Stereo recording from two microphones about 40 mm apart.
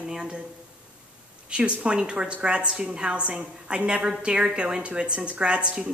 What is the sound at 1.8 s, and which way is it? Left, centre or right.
A woman's voice, right.